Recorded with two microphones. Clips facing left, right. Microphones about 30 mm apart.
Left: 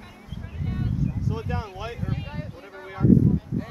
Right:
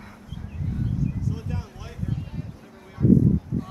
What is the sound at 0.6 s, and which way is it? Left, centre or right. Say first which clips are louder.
Speech: even; left.